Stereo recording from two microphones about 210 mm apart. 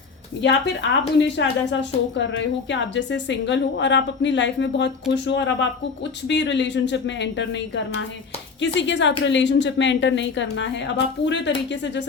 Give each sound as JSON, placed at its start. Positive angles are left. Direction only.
{"t": 0.4, "sound": "a woman's voice", "side_deg": 60}